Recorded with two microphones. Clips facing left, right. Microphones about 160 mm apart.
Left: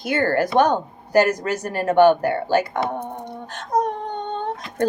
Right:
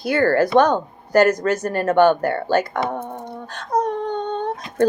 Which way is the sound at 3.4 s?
20° left (ahead or behind).